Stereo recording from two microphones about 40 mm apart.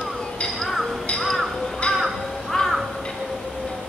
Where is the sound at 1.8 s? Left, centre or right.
Left.